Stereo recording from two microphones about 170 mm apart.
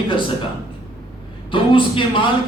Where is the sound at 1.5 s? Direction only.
30° left (ahead or behind).